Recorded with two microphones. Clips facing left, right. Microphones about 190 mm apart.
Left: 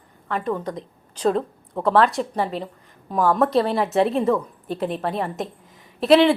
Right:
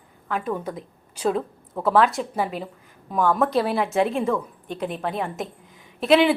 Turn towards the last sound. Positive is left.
turn(degrees=0)  # may be behind; listen again after turning